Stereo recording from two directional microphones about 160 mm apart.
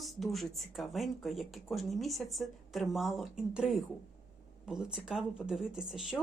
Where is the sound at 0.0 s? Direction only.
Centre (ahead or behind).